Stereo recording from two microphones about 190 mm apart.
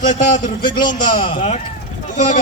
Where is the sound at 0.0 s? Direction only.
40° left (ahead or behind).